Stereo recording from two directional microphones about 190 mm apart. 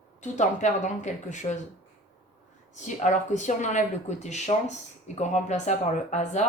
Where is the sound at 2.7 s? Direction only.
40° left (ahead or behind).